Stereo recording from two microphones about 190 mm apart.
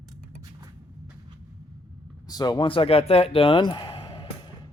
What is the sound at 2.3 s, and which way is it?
Speech, 20° left (ahead or behind).